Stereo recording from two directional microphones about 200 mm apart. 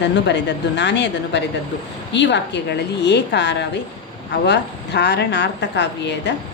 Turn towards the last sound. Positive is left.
turn(degrees=60)  # may be behind; listen again after turning